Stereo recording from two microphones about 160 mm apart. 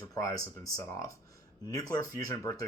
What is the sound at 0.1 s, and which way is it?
Speech, 20° left (ahead or behind).